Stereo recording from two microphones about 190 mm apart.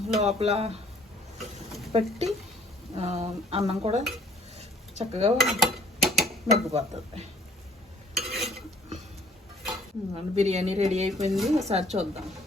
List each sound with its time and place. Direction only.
0.2 s dishes: 35° right (ahead or behind)
1.4 s a sound: centre (ahead or behind)
1.9 s dishes: 35° right (ahead or behind)
5.4 s stir: centre (ahead or behind)
6.7 s dishes: 35° right (ahead or behind)
8.1 s stir: centre (ahead or behind)
10.2 s dishes: 35° right (ahead or behind)
11.3 s speech: centre (ahead or behind)
11.5 s dishes: 35° right (ahead or behind)